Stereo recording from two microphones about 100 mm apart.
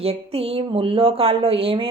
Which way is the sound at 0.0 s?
80° right.